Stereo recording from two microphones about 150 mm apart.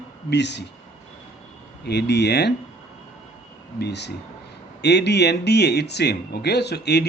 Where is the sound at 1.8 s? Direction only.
90° left.